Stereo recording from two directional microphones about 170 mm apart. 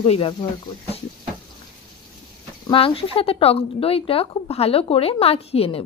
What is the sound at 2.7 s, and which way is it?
Speech, 30° left (ahead or behind).